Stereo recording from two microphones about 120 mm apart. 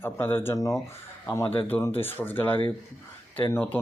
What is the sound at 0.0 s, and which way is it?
Speech, 20° left (ahead or behind).